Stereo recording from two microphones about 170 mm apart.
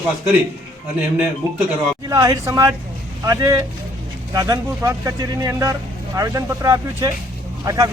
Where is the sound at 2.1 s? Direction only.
20° right (ahead or behind).